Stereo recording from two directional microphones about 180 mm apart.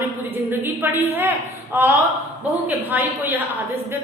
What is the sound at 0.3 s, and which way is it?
A woman's voice, 10° right (ahead or behind).